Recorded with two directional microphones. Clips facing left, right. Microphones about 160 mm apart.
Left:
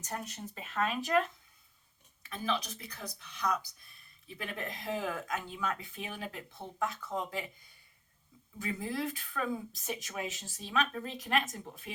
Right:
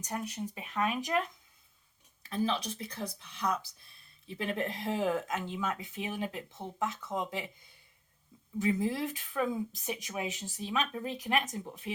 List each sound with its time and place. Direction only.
0.0 s speech: 15° right (ahead or behind)
2.2 s speech: 35° right (ahead or behind)
8.5 s speech: 20° right (ahead or behind)